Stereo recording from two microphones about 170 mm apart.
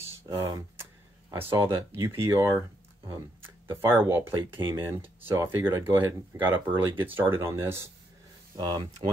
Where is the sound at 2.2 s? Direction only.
20° right (ahead or behind).